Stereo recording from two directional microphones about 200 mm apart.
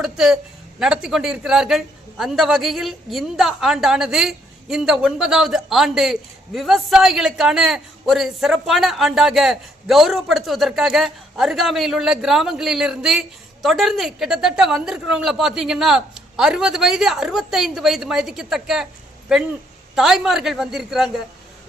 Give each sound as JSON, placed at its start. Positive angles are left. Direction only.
{"t": 0.0, "sound": "a man's voice", "side_deg": -5}